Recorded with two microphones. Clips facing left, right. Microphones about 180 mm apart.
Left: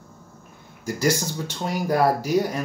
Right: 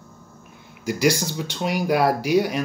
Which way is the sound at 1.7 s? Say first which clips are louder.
Right 1 dB; 75° right (ahead or behind).